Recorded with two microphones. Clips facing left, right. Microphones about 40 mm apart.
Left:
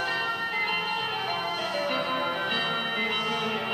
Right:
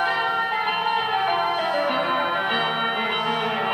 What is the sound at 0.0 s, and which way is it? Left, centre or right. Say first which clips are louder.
Music: right 6 dB; right.